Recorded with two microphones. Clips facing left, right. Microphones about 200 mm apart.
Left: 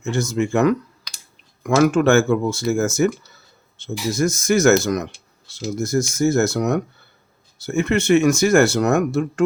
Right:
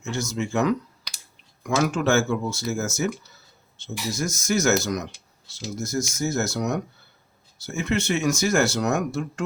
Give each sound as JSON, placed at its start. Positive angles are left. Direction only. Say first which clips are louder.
{"t": 0.0, "sound": "speech", "louder": "left 7 dB", "side_deg": 55}